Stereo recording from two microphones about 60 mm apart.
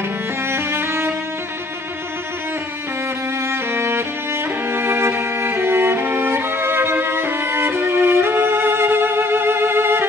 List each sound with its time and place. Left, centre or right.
0.5 s music: right
3.4 s music: right